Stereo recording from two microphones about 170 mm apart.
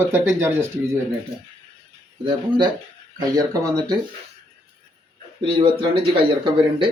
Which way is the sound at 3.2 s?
20° right (ahead or behind).